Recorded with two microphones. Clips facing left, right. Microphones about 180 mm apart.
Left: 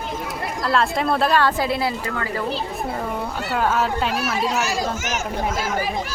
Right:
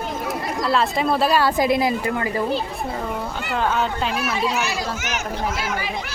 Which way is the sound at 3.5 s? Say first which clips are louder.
Left 1 dB; 5° left (ahead or behind).